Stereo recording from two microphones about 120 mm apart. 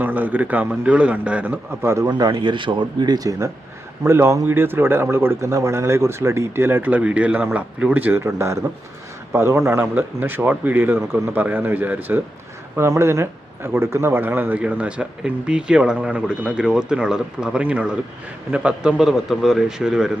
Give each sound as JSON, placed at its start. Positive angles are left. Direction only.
{"t": 0.0, "sound": "speech", "side_deg": -15}
{"t": 2.0, "sound": "speech", "side_deg": -35}
{"t": 4.0, "sound": "speech", "side_deg": -20}